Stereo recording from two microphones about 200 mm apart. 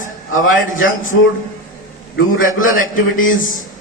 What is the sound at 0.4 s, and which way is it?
Speech, 75° left (ahead or behind).